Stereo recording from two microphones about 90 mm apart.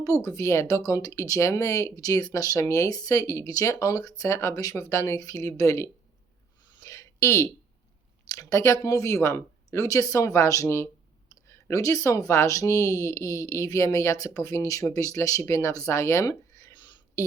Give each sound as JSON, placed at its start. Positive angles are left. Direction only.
{"t": 0.0, "sound": "speech", "side_deg": 40}
{"t": 6.7, "sound": "a sound", "side_deg": 35}
{"t": 8.3, "sound": "speech", "side_deg": 40}